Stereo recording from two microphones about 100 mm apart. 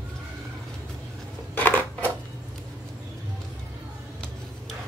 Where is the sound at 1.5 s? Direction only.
15° left (ahead or behind).